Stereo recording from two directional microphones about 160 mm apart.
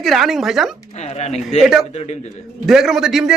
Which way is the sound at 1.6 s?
Centre (ahead or behind).